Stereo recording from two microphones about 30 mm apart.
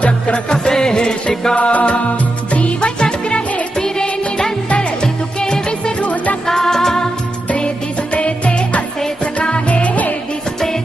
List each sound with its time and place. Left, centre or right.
0.0 s music: left
0.5 s music: left
1.5 s music: left
2.8 s music: left
3.8 s music: left
5.4 s music: left
6.0 s music: left
6.4 s music: centre
8.1 s music: left
9.6 s music: left